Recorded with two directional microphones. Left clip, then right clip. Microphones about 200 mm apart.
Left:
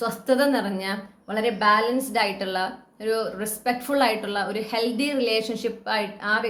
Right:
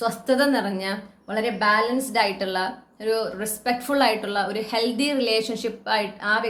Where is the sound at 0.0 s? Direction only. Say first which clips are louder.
Even; centre (ahead or behind).